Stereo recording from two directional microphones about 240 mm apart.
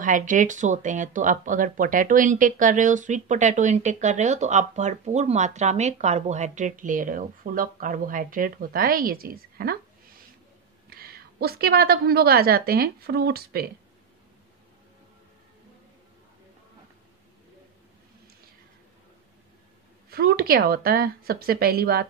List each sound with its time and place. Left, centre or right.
0.0 s speech: right
20.1 s speech: right